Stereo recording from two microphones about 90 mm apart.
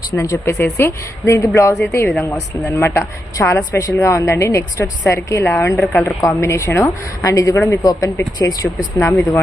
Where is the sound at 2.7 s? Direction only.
30° left (ahead or behind).